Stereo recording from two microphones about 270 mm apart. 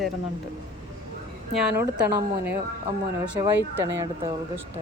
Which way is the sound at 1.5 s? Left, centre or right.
Centre.